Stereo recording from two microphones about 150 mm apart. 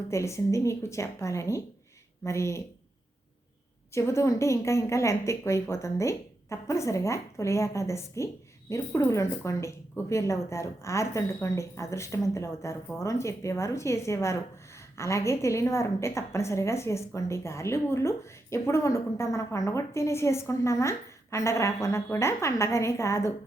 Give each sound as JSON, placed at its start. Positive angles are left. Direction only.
{"t": 0.1, "sound": "a woman's voice", "side_deg": 20}
{"t": 3.9, "sound": "a woman's voice", "side_deg": 20}